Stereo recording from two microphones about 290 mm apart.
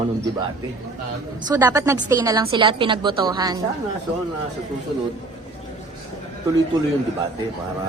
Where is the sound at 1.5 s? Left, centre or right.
Centre.